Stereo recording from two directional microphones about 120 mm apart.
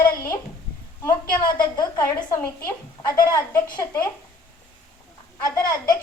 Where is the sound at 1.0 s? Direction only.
35° left (ahead or behind).